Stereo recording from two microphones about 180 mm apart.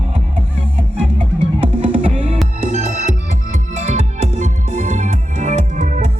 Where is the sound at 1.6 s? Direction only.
30° right (ahead or behind).